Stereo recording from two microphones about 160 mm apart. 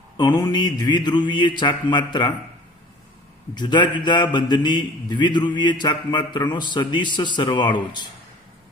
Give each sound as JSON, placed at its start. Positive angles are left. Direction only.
{"t": 0.2, "sound": "a man's voice", "side_deg": 25}
{"t": 3.5, "sound": "a man's voice", "side_deg": 25}